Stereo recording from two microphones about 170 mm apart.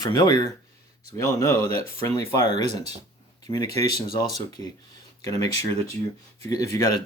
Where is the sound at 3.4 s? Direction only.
25° left (ahead or behind).